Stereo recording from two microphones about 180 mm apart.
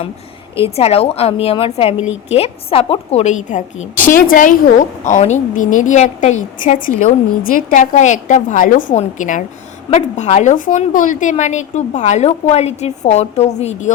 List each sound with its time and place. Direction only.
0.8 s a woman's voice: 35° left (ahead or behind)